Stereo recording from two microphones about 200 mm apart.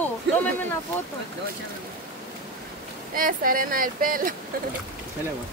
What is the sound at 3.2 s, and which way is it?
Speech, 45° right (ahead or behind).